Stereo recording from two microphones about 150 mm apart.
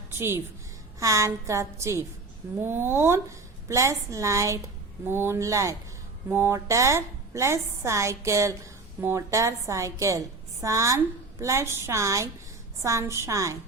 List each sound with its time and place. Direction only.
0.1 s a woman's voice: 15° right (ahead or behind)